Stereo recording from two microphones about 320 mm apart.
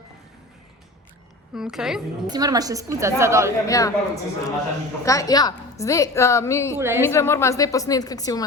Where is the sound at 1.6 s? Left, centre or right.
Centre.